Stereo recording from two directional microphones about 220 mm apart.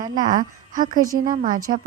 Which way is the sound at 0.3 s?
35° right (ahead or behind).